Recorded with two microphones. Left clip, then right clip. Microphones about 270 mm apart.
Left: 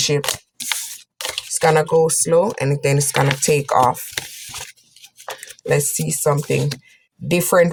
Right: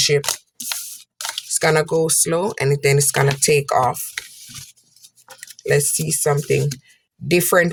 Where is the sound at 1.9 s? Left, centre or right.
Right.